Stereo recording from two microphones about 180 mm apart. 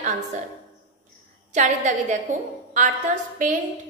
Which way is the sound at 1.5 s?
40° right (ahead or behind).